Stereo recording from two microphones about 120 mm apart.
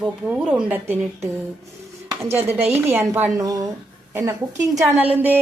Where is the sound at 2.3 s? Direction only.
60° right (ahead or behind).